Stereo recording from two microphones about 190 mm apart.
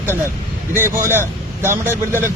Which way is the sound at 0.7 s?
10° right (ahead or behind).